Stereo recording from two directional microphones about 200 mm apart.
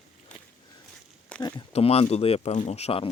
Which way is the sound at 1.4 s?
20° left (ahead or behind).